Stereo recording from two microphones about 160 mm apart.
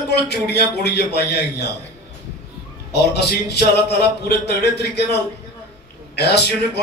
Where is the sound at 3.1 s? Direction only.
90° left.